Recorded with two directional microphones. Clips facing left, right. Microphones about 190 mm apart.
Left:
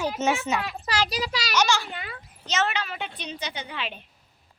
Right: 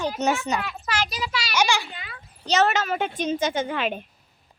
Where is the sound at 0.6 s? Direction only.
35° left (ahead or behind).